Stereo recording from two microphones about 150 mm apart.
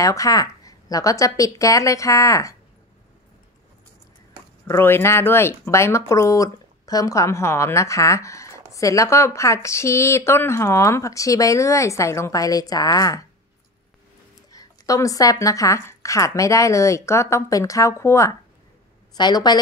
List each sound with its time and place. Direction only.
0.0 s speech: 20° left (ahead or behind)
4.6 s speech: 15° left (ahead or behind)
14.5 s speech: 25° left (ahead or behind)